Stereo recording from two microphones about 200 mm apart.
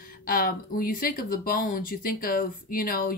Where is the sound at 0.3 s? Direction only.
45° left (ahead or behind).